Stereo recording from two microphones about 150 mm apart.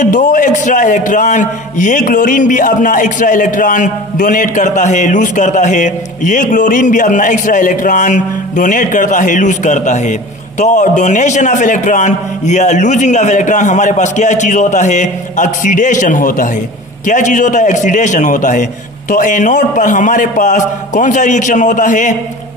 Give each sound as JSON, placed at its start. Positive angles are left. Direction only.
{"t": 0.0, "sound": "a man's voice", "side_deg": 55}